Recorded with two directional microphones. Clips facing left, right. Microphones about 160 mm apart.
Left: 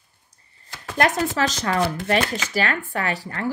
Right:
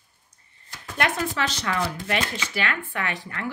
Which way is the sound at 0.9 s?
40° left (ahead or behind).